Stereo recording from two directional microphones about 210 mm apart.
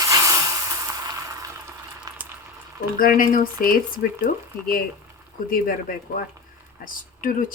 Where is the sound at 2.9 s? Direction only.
40° left (ahead or behind).